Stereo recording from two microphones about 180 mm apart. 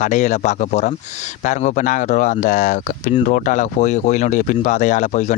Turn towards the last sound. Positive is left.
turn(degrees=40)  # may be behind; listen again after turning